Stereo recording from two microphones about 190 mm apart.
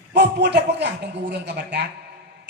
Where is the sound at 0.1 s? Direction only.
65° right (ahead or behind).